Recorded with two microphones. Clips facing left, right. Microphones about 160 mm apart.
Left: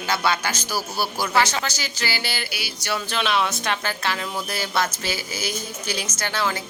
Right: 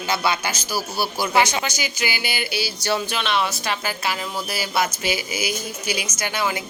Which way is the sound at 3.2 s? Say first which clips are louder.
Even; centre (ahead or behind).